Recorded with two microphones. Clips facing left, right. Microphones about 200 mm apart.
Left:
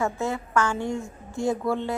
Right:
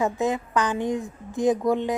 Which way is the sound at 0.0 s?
20° right (ahead or behind).